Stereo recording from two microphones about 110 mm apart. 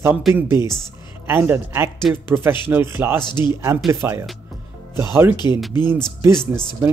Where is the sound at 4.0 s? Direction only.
25° right (ahead or behind).